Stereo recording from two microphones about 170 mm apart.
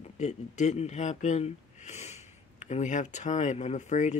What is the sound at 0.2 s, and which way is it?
Speech, 40° left (ahead or behind).